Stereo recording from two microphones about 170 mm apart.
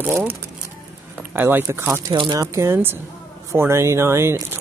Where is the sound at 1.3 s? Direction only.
15° right (ahead or behind).